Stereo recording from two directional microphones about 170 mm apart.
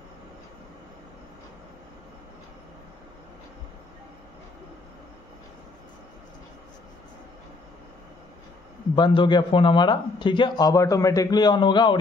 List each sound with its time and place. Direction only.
8.9 s a man's voice: 30° left (ahead or behind)